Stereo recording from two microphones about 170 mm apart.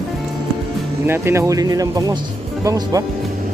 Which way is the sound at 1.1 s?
15° right (ahead or behind).